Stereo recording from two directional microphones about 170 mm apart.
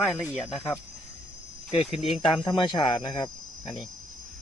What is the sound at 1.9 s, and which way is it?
Speech, 35° left (ahead or behind).